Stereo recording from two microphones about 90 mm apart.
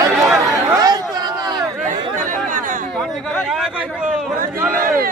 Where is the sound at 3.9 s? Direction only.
10° right (ahead or behind).